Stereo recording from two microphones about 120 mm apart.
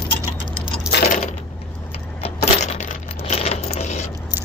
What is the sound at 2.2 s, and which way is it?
Coin, 60° left (ahead or behind).